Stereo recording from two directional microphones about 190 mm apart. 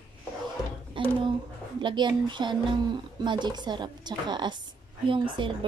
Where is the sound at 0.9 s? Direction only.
25° right (ahead or behind).